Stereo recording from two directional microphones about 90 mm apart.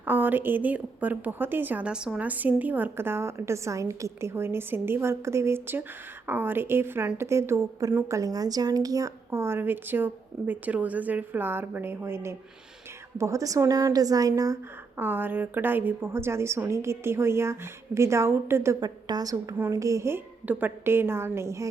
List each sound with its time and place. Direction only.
0.0 s a woman's voice: 20° right (ahead or behind); by 14.6 s 40° right (ahead or behind)
14.9 s a woman's voice: 20° right (ahead or behind)
18.8 s a woman's voice: 50° right (ahead or behind)